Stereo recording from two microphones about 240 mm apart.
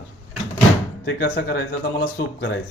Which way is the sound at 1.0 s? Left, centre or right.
Left.